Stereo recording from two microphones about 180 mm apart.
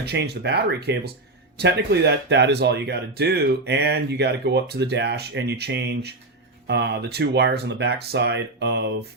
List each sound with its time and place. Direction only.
0.0 s speech: 65° right (ahead or behind)